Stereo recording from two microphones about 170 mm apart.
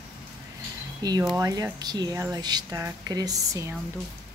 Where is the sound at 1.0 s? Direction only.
25° right (ahead or behind).